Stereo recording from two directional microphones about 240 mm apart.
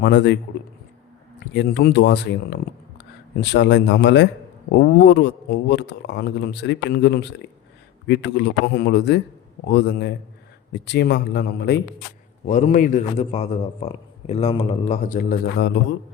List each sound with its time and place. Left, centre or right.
0.0 s speech: left
1.5 s speech: left
12.5 s a man's voice: left